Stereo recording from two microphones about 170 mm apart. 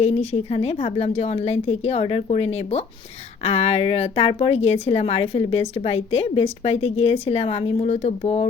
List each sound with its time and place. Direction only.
0.0 s a woman's voice: 35° left (ahead or behind)